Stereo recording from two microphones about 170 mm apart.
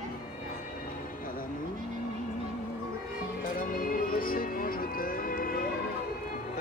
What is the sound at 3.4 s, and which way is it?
Music, 55° left (ahead or behind).